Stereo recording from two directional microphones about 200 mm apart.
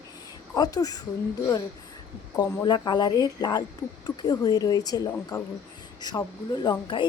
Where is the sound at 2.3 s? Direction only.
15° left (ahead or behind).